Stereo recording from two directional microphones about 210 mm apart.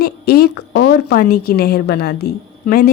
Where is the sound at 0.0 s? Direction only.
50° left (ahead or behind).